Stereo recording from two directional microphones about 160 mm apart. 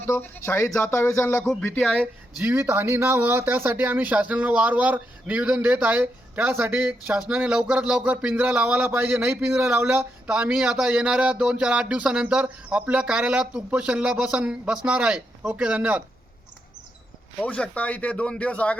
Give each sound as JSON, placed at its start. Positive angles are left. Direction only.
{"t": 0.0, "sound": "speech", "side_deg": 15}
{"t": 1.5, "sound": "speech", "side_deg": 5}
{"t": 2.0, "sound": "speech", "side_deg": -10}
{"t": 17.4, "sound": "speech", "side_deg": 10}